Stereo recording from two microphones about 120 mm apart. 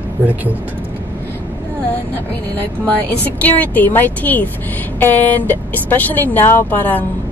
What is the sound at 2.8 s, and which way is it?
A woman's voice, 15° left (ahead or behind).